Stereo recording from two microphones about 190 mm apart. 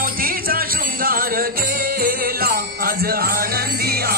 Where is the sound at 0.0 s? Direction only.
50° right (ahead or behind).